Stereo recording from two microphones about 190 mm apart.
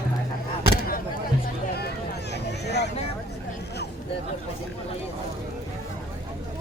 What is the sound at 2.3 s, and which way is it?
Vehicle, 60° left (ahead or behind).